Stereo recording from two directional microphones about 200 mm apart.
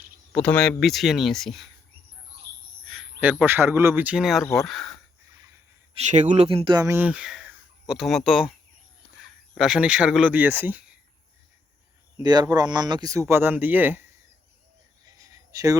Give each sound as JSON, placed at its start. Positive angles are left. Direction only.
{"t": 0.3, "sound": "speech", "side_deg": 5}
{"t": 2.8, "sound": "speech", "side_deg": 0}
{"t": 5.9, "sound": "speech", "side_deg": -35}
{"t": 12.2, "sound": "speech", "side_deg": -20}
{"t": 15.0, "sound": "a sound", "side_deg": -15}